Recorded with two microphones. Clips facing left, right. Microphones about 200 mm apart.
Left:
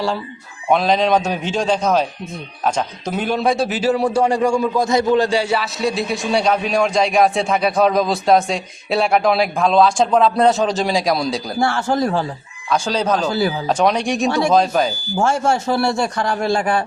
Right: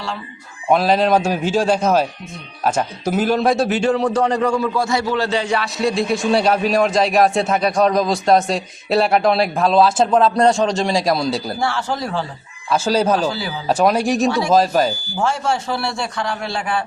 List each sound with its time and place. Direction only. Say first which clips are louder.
0.7 s a man's voice: right 1 dB; 5° right (ahead or behind)
11.6 s speech: left 8 dB; 50° left (ahead or behind)
12.7 s a man's voice: right 2 dB; 5° right (ahead or behind)
15.2 s speech: left 3 dB; 45° left (ahead or behind)